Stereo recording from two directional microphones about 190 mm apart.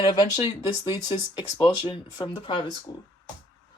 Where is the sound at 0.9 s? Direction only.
25° left (ahead or behind).